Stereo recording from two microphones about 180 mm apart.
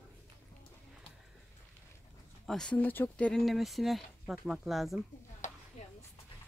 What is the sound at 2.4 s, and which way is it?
Speech, 5° left (ahead or behind).